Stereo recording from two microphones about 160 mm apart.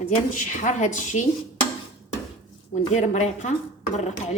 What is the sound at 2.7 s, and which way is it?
Speech, 50° left (ahead or behind).